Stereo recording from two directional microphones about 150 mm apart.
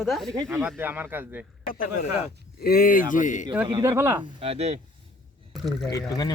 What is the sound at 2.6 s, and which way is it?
Speech, 80° left.